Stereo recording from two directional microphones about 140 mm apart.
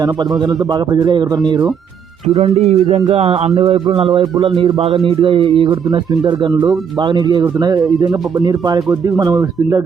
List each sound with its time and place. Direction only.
0.0 s speech: 30° right (ahead or behind)
2.2 s music: 45° right (ahead or behind)
3.8 s speech: 40° right (ahead or behind); by 9.8 s 25° right (ahead or behind)